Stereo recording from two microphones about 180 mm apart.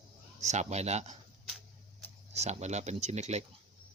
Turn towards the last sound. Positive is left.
turn(degrees=-40)  # may be behind; listen again after turning